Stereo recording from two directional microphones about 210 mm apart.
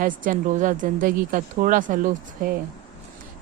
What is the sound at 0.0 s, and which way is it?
Speech, 40° right (ahead or behind).